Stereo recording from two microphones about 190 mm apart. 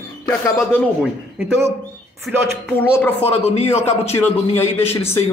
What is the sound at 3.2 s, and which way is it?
A man's voice, 35° left (ahead or behind).